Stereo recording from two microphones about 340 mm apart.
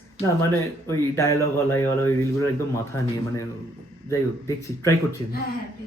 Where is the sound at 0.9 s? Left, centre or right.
Centre.